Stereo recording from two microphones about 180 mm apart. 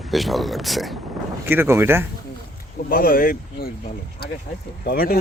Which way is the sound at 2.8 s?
55° left (ahead or behind).